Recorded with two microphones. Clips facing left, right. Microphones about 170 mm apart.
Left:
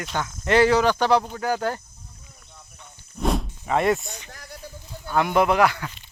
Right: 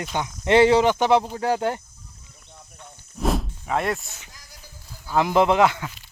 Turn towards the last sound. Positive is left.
turn(degrees=-20)  # may be behind; listen again after turning